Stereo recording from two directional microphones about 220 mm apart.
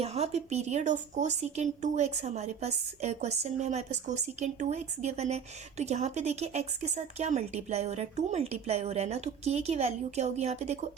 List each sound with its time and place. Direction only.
0.0 s speech: 30° right (ahead or behind)